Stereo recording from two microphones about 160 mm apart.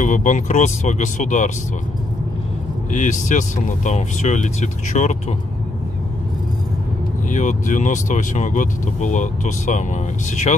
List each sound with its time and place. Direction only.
0.0 s speech: 50° left (ahead or behind)
2.9 s speech: 50° left (ahead or behind)
7.2 s speech: 50° left (ahead or behind)